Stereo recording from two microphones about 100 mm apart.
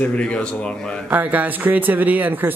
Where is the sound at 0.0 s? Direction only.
10° left (ahead or behind).